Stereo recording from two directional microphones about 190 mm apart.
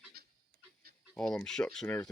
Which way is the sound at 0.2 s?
55° right (ahead or behind).